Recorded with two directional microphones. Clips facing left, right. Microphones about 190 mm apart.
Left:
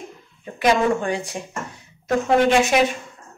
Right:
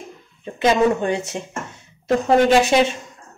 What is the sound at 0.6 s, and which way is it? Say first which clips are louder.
A woman's voice: right 2 dB; 25° right (ahead or behind).